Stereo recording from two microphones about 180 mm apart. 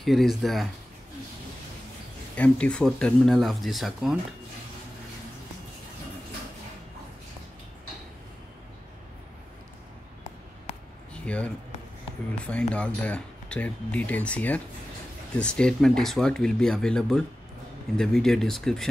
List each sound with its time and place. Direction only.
0.0 s speech: centre (ahead or behind)
2.3 s speech: 5° left (ahead or behind)
11.2 s speech: 5° left (ahead or behind)
12.7 s speech: 5° left (ahead or behind)